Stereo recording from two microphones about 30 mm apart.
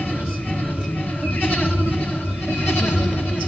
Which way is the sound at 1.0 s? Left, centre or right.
Left.